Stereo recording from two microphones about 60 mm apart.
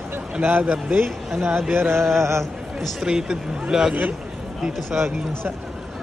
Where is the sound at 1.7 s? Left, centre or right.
Right.